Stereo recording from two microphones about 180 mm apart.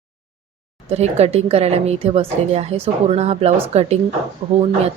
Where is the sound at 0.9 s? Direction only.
35° right (ahead or behind).